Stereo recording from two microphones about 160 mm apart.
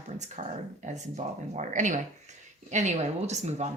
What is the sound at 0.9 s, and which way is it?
Speech, 50° right (ahead or behind).